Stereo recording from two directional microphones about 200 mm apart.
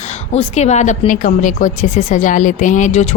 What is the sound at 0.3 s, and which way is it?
A woman's voice, 35° left (ahead or behind).